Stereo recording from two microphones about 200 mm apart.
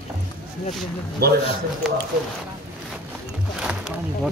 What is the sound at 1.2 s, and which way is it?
Speech, 50° right (ahead or behind).